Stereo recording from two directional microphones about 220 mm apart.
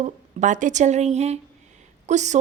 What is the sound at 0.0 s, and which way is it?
Speech, 35° right (ahead or behind).